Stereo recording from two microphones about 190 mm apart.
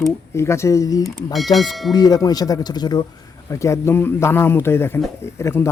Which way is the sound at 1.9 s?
20° left (ahead or behind).